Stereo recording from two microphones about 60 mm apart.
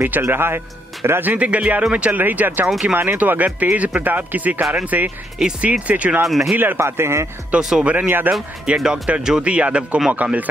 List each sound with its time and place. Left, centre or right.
0.2 s a man's voice: right
1.2 s speech: right
6.2 s speech: centre
6.5 s a man's voice: right
6.8 s a man's voice: right
7.5 s speech: right
8.6 s speech: centre